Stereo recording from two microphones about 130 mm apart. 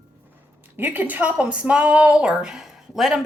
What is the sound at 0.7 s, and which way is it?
Speech, 15° right (ahead or behind).